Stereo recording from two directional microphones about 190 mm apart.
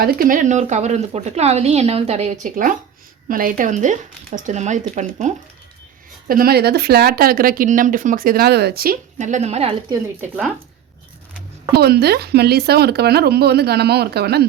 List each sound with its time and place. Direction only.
0.0 s a woman's voice: 50° right (ahead or behind)
6.2 s speech: 50° right (ahead or behind); by 9.7 s 35° right (ahead or behind)
9.9 s speech: 10° right (ahead or behind)
11.7 s speech: 55° right (ahead or behind)